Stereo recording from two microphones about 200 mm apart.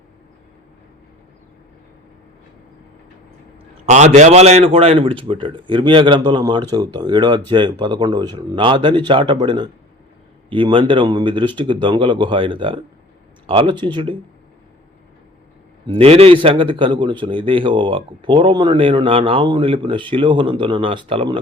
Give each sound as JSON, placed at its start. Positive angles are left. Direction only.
{"t": 3.8, "sound": "a man's voice", "side_deg": -35}
{"t": 15.9, "sound": "a man's voice", "side_deg": -30}